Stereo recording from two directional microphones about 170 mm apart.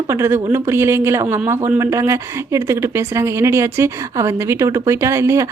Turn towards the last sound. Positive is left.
turn(degrees=-15)  # may be behind; listen again after turning